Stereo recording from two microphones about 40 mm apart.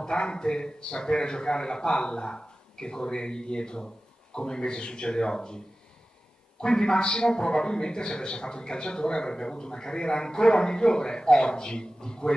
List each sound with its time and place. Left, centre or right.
0.0 s a man's voice: left
6.6 s a man's voice: centre